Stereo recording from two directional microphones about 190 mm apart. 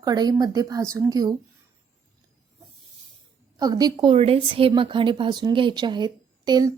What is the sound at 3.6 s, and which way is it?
A woman's voice, 20° right (ahead or behind).